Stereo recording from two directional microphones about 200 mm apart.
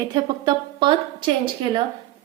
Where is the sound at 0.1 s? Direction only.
20° right (ahead or behind).